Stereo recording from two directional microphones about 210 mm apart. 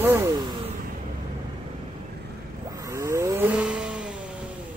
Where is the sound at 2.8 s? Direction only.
15° right (ahead or behind).